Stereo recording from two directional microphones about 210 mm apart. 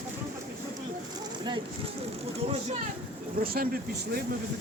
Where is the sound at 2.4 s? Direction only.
30° right (ahead or behind).